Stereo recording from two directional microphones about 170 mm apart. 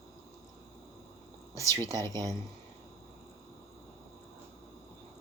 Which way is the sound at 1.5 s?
15° left (ahead or behind).